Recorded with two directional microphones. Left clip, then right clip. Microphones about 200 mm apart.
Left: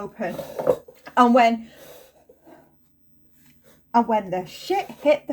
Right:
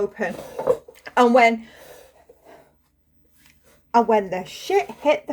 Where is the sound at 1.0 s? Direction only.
50° right (ahead or behind).